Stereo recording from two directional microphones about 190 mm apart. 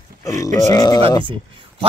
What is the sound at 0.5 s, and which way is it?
Speech, 20° left (ahead or behind).